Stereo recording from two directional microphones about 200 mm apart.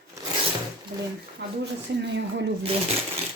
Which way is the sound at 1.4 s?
55° right (ahead or behind).